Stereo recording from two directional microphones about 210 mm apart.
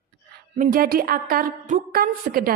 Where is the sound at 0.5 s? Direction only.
45° right (ahead or behind).